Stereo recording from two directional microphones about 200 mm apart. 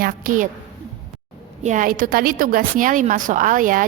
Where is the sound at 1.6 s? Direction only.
40° right (ahead or behind).